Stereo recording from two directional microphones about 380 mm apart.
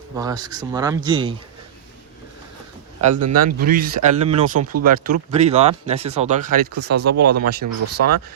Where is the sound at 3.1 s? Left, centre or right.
Right.